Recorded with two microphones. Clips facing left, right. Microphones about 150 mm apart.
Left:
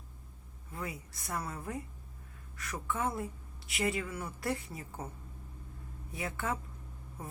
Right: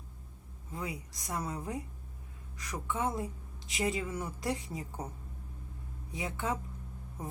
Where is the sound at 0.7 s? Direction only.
15° right (ahead or behind).